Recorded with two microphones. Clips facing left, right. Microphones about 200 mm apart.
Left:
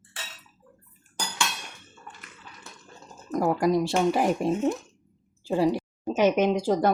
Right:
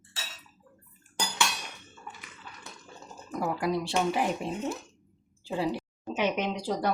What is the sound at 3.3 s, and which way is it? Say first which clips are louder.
Speech: left 6 dB; 45° left (ahead or behind).